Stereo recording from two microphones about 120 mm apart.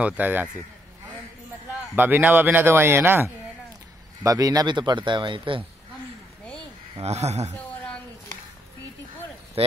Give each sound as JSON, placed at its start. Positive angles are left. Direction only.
{"t": 0.0, "sound": "speech", "side_deg": -15}
{"t": 2.0, "sound": "speech", "side_deg": -15}
{"t": 7.0, "sound": "speech", "side_deg": -60}
{"t": 7.5, "sound": "a sound", "side_deg": 10}
{"t": 9.6, "sound": "speech", "side_deg": -50}